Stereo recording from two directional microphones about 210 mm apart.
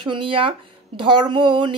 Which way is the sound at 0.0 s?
25° right (ahead or behind).